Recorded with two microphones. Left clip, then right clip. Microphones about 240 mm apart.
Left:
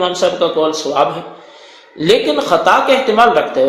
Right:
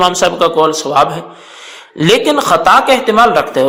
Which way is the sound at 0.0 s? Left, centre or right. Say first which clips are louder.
Right 4 dB; right.